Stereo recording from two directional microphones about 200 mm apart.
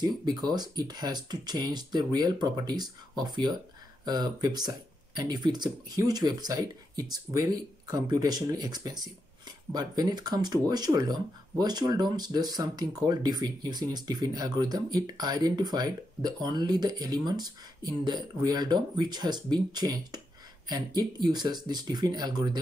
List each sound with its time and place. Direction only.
0.0 s speech: 20° right (ahead or behind)